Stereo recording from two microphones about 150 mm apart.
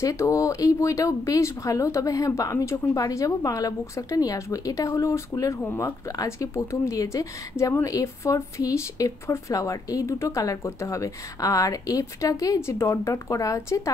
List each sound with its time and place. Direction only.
0.0 s speech: 20° left (ahead or behind)